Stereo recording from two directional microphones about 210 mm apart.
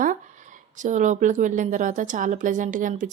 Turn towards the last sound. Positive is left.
turn(degrees=-35)  # may be behind; listen again after turning